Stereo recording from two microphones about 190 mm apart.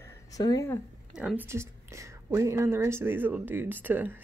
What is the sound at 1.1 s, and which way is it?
A woman's voice, 5° right (ahead or behind).